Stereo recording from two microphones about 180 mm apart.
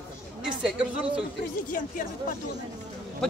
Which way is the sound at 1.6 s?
45° left (ahead or behind).